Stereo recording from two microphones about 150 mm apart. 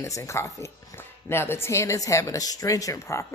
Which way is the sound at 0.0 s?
20° left (ahead or behind).